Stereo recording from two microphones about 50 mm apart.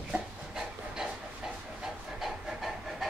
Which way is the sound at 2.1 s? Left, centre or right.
Centre.